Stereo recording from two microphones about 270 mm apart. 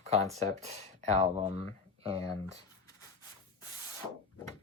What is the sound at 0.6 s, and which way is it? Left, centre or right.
Speech, right.